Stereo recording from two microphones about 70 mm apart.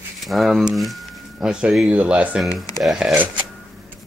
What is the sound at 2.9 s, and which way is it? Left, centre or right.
Speech, centre.